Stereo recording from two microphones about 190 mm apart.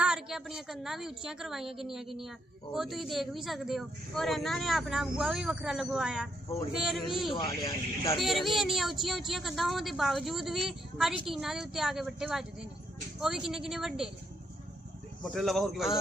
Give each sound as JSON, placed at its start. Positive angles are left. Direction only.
{"t": 0.0, "sound": "speech", "side_deg": -5}
{"t": 7.3, "sound": "speech", "side_deg": 20}
{"t": 8.2, "sound": "speech", "side_deg": 0}
{"t": 15.2, "sound": "speech", "side_deg": 0}